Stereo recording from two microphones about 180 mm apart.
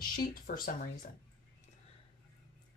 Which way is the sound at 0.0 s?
50° left (ahead or behind).